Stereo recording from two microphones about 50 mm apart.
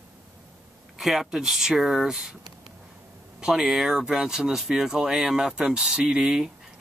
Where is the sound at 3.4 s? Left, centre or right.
Centre.